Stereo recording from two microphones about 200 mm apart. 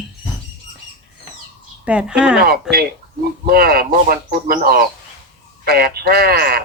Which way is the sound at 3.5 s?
50° right (ahead or behind).